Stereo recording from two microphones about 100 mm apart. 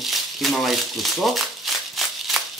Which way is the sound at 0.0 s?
Centre (ahead or behind).